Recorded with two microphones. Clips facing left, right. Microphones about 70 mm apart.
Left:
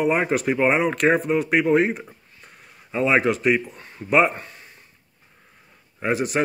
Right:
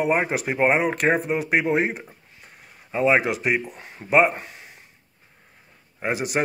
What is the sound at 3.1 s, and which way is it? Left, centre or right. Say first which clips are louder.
Speech: left 1 dB; centre.